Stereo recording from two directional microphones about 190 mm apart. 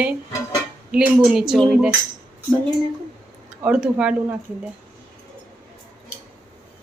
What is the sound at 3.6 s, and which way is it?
Speech, 5° right (ahead or behind).